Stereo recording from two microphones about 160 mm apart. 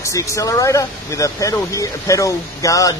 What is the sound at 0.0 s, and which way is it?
Speech, 20° left (ahead or behind).